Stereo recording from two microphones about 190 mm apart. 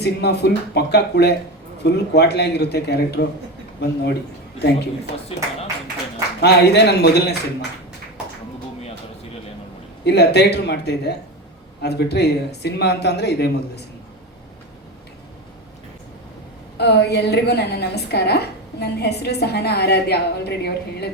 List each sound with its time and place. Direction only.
0.0 s a woman's voice: 60° left (ahead or behind)
5.3 s speech: 30° left (ahead or behind)
6.4 s a woman's voice: 60° left (ahead or behind)
10.0 s a woman's voice: 60° left (ahead or behind)
16.7 s a woman's voice: 60° left (ahead or behind)